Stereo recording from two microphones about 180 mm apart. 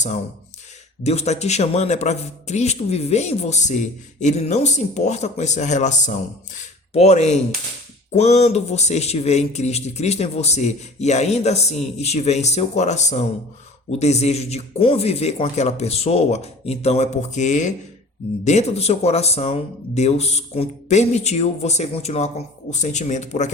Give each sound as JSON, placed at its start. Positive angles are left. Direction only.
{"t": 1.0, "sound": "a man's voice", "side_deg": 35}